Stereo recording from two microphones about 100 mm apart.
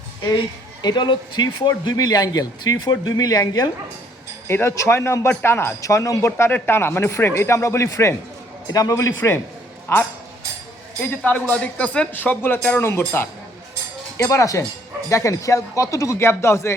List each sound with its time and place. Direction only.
0.8 s speech: 45° left (ahead or behind)
4.4 s speech: 25° left (ahead or behind)
11.1 s speech: 15° left (ahead or behind)